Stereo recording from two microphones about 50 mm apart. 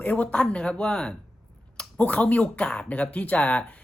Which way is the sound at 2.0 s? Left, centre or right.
Left.